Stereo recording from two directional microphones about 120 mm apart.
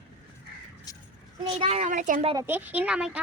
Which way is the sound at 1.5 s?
55° right (ahead or behind).